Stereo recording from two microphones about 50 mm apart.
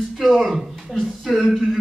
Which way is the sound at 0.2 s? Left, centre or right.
Centre.